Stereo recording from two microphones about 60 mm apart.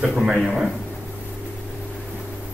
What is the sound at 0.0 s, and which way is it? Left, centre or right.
Speech, centre.